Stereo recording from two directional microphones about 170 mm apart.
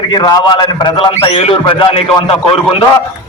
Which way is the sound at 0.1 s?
25° left (ahead or behind).